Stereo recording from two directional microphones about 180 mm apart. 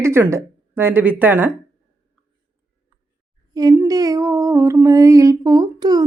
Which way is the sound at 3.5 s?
20° right (ahead or behind).